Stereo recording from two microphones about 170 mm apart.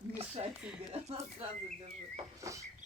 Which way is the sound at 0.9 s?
35° right (ahead or behind).